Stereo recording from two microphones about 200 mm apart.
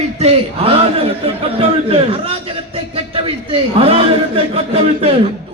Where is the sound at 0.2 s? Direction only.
30° right (ahead or behind).